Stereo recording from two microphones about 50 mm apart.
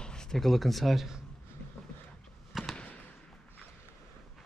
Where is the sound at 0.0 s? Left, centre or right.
Centre.